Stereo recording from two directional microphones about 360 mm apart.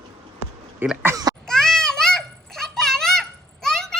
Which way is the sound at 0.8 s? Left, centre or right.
Centre.